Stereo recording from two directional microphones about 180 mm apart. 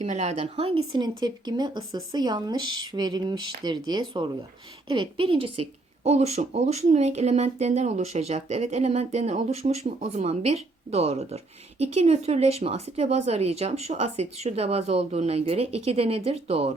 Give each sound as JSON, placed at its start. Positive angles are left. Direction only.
{"t": 0.0, "sound": "speech", "side_deg": -35}